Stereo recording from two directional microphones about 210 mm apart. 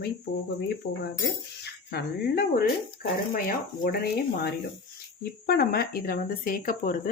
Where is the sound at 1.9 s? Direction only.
50° left (ahead or behind).